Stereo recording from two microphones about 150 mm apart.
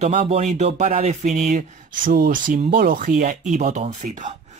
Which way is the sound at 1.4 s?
60° right (ahead or behind).